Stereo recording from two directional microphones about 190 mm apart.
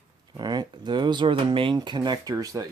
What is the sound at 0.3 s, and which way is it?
Speech, 20° right (ahead or behind).